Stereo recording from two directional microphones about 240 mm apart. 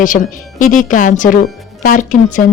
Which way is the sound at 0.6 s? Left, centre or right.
Left.